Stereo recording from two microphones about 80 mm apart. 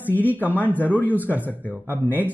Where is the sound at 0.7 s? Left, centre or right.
Left.